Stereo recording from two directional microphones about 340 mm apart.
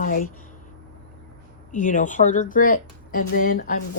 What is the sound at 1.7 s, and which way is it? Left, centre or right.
Speech, left.